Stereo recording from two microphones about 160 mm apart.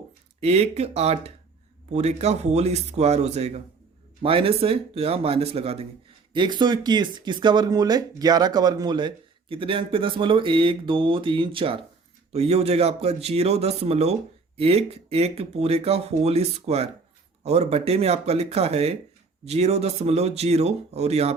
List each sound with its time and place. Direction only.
0.3 s a man's voice: 40° right (ahead or behind)